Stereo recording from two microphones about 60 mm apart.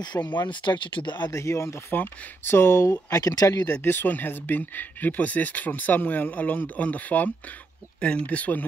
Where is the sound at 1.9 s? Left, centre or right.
Left.